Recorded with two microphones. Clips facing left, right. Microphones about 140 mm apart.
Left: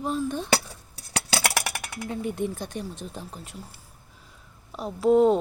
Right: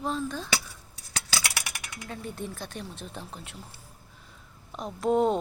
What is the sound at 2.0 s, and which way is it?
Speech, 15° left (ahead or behind).